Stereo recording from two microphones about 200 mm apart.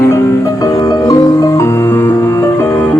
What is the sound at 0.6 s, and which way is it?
Music, 15° left (ahead or behind).